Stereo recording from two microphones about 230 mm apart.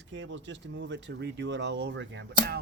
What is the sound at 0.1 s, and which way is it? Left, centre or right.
Speech, right.